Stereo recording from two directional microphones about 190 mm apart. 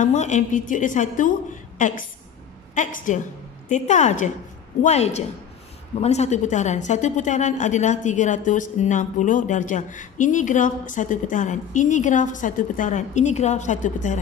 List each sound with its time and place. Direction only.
0.0 s a woman's voice: 40° left (ahead or behind)